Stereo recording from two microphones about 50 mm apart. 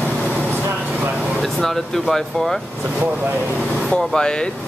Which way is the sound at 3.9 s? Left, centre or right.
Centre.